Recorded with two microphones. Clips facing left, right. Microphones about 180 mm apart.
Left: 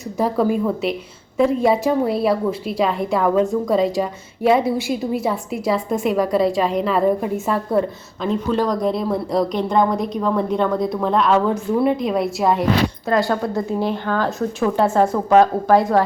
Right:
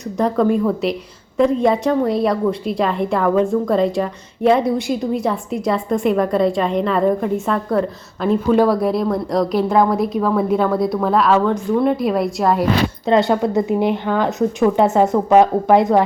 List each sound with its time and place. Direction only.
0.2 s a woman's voice: 5° left (ahead or behind)
8.2 s a woman's voice: 5° right (ahead or behind)
13.1 s speech: 20° right (ahead or behind)